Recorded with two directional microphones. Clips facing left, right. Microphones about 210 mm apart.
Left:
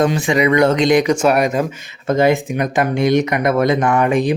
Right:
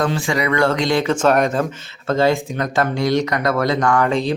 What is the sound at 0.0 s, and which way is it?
Speech, 20° left (ahead or behind).